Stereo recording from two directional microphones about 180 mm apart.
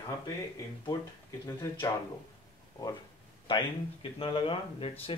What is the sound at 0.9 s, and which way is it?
Speech, 20° left (ahead or behind).